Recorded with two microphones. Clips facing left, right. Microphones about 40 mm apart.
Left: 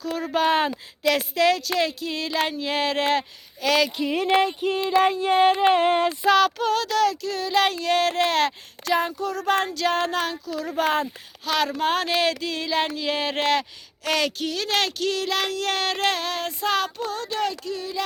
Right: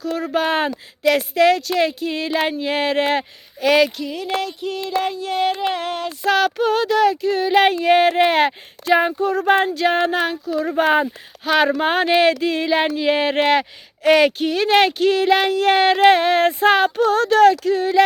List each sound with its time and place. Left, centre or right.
0.0 s speech: centre
4.0 s female singing: left
4.8 s a sound: centre
5.0 s a sound: left
5.5 s female singing: left
6.2 s speech: centre; by 16.9 s right
17.0 s speech: right